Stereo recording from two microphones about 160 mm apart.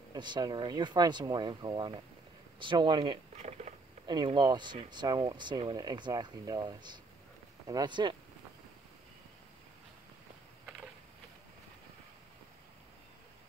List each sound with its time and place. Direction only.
0.1 s speech: 25° right (ahead or behind)